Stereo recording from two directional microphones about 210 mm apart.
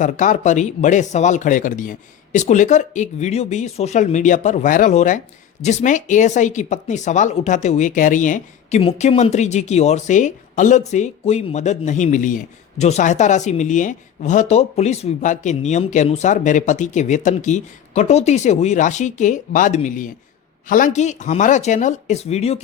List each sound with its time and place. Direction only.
0.0 s speech: 35° left (ahead or behind)